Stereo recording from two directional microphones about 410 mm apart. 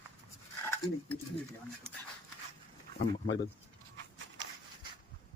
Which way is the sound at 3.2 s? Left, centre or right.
Left.